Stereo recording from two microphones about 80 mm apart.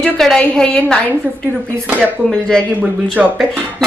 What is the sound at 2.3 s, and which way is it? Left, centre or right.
Speech, centre.